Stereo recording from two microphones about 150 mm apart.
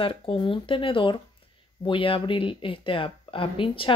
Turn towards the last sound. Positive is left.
turn(degrees=35)  # may be behind; listen again after turning